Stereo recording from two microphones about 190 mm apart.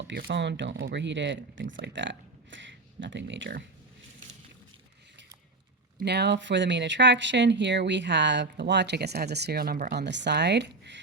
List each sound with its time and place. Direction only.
0.1 s speech: 60° right (ahead or behind)
6.0 s speech: 60° right (ahead or behind)